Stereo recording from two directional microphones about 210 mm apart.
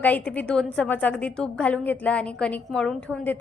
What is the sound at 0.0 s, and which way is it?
A woman's voice, 5° left (ahead or behind).